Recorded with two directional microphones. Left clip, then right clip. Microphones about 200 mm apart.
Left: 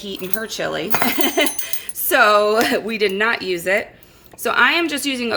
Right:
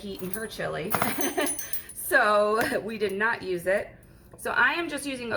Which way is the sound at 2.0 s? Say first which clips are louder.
Left 8 dB; 50° left (ahead or behind).